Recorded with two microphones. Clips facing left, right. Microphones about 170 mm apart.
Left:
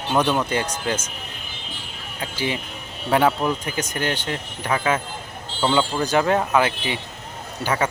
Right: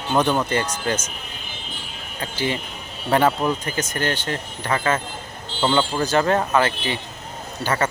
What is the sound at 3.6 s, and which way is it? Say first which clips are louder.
Speech: right 1 dB; 10° left (ahead or behind).